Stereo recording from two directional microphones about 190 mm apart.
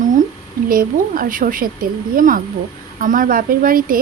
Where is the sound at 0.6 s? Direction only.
50° right (ahead or behind).